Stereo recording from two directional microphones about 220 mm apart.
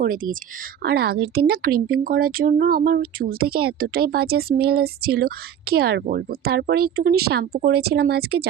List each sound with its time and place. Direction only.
0.0 s a woman's voice: 40° right (ahead or behind)